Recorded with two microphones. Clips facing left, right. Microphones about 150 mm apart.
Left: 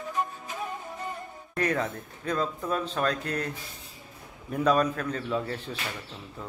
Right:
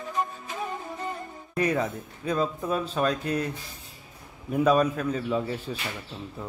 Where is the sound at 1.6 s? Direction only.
10° right (ahead or behind).